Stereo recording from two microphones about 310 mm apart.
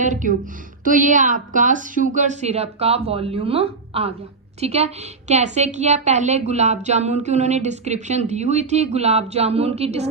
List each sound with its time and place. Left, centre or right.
0.0 s speech: right